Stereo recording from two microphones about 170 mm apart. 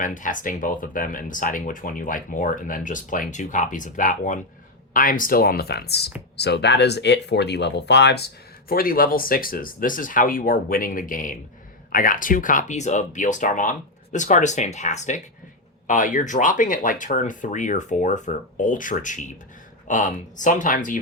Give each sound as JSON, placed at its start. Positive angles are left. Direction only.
{"t": 0.0, "sound": "speech", "side_deg": 50}
{"t": 8.7, "sound": "speech", "side_deg": 60}